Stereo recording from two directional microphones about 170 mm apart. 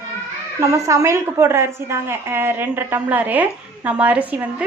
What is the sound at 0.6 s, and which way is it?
A woman's voice, 20° right (ahead or behind).